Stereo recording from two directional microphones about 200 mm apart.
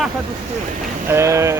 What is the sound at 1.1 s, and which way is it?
Speech, 15° right (ahead or behind).